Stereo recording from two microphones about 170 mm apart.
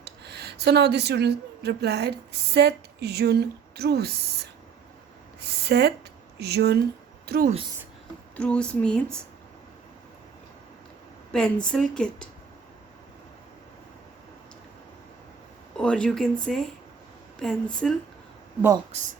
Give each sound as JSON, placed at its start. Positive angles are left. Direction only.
{"t": 0.0, "sound": "speech", "side_deg": -75}
{"t": 7.3, "sound": "speech", "side_deg": -60}
{"t": 8.4, "sound": "a woman's voice", "side_deg": 5}
{"t": 11.3, "sound": "a woman's voice", "side_deg": 5}
{"t": 15.8, "sound": "a woman's voice", "side_deg": 5}
{"t": 18.9, "sound": "speech", "side_deg": -40}